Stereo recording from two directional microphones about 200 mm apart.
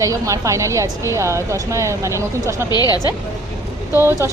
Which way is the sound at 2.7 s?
20° left (ahead or behind).